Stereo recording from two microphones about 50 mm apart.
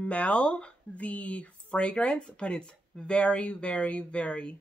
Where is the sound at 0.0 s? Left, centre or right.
Left.